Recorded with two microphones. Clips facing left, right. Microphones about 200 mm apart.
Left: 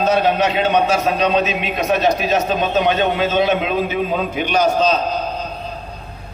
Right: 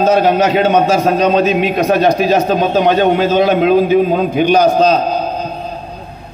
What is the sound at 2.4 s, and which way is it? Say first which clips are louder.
A man's voice: right 5 dB; 35° right (ahead or behind).